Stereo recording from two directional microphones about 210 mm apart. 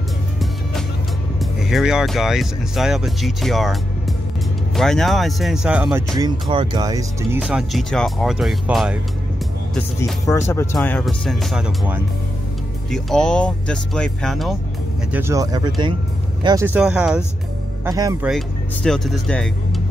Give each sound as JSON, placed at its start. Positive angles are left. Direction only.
{"t": 1.4, "sound": "speech", "side_deg": 0}
{"t": 4.7, "sound": "speech", "side_deg": 0}
{"t": 6.5, "sound": "speech", "side_deg": -20}
{"t": 9.8, "sound": "speech", "side_deg": 10}
{"t": 15.1, "sound": "speech", "side_deg": -15}
{"t": 17.8, "sound": "speech", "side_deg": -15}
{"t": 18.2, "sound": "speech", "side_deg": 0}